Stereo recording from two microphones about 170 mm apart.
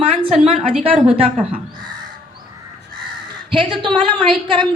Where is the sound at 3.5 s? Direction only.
30° right (ahead or behind).